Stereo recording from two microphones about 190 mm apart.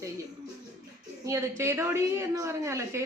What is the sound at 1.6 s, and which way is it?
Speech, 15° right (ahead or behind).